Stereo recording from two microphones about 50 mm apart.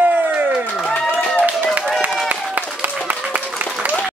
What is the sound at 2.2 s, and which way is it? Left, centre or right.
Applause, right.